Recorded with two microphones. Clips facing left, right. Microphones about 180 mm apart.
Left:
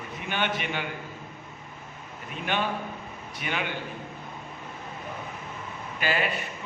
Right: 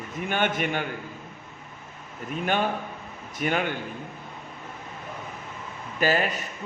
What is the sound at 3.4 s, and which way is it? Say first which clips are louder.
Speech: right 6 dB; 45° right (ahead or behind).